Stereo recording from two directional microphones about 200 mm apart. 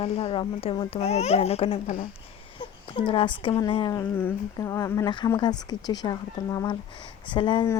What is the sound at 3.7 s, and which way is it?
Speech, 25° left (ahead or behind).